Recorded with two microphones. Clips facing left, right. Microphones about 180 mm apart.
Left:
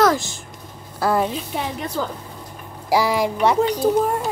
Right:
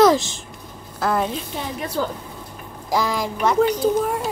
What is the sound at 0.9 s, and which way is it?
Speech, centre (ahead or behind).